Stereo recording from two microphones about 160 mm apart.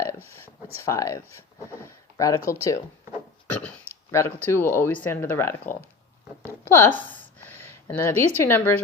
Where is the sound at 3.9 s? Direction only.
15° left (ahead or behind).